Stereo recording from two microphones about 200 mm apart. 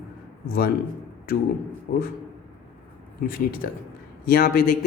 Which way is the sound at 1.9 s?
55° left (ahead or behind).